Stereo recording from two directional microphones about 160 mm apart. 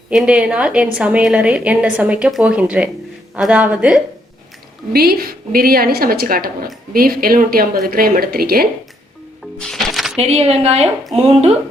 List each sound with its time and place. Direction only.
0.1 s a woman's voice: 5° right (ahead or behind)
4.9 s a woman's voice: 75° right (ahead or behind)
9.6 s music: 5° left (ahead or behind)
10.2 s a woman's voice: 40° right (ahead or behind)